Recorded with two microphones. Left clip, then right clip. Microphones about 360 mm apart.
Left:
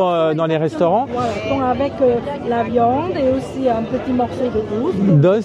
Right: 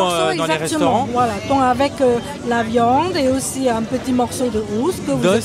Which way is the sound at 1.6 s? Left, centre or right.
Right.